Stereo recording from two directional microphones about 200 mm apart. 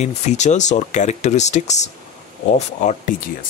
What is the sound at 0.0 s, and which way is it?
Speech, 35° left (ahead or behind).